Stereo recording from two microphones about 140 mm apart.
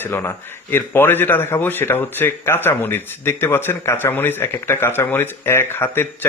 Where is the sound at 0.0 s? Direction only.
15° left (ahead or behind).